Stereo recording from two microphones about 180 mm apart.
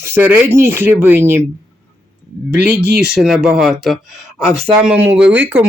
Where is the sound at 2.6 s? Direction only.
65° right (ahead or behind).